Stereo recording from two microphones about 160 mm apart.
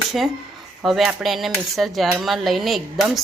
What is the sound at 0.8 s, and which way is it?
Speech, 5° right (ahead or behind).